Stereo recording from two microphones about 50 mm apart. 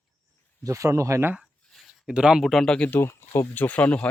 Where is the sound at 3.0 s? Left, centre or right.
Left.